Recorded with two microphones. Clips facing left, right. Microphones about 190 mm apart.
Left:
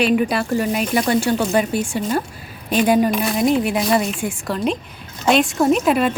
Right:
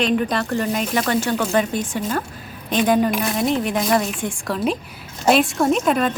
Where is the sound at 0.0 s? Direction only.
10° left (ahead or behind).